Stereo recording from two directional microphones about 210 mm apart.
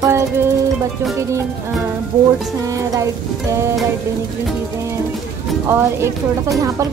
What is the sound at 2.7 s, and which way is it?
Speech, 15° right (ahead or behind).